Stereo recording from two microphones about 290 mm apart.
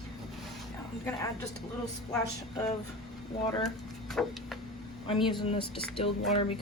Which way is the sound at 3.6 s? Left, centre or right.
Centre.